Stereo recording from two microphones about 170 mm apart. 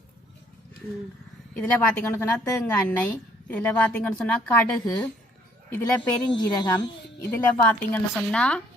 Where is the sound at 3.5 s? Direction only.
10° left (ahead or behind).